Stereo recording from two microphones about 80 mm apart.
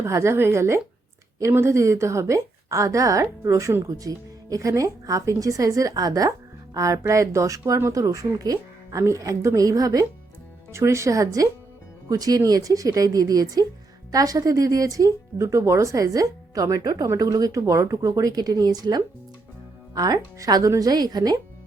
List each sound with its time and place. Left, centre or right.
0.0 s a woman's voice: right
10.7 s a woman's voice: right